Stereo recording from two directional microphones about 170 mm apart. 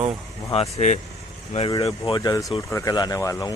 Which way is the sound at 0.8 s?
40° left (ahead or behind).